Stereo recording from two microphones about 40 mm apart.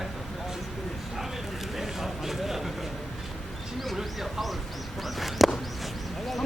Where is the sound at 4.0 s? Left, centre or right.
Centre.